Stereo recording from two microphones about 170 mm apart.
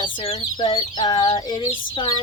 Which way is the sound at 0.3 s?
25° left (ahead or behind).